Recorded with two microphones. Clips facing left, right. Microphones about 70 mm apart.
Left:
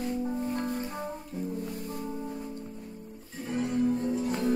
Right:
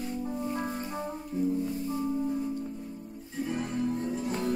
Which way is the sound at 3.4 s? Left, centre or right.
Centre.